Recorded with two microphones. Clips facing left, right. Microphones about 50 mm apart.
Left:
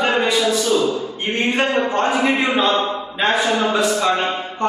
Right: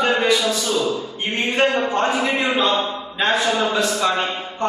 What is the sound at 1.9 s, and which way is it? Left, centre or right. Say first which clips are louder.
A man's voice: left 2 dB; centre.